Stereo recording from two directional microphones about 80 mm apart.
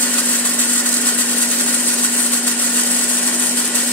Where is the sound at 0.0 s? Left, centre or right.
Centre.